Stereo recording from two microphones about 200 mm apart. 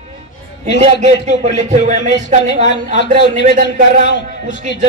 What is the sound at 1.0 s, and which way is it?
Speech, 35° right (ahead or behind).